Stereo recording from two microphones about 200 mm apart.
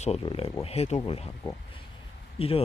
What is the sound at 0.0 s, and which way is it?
Speech, 30° left (ahead or behind).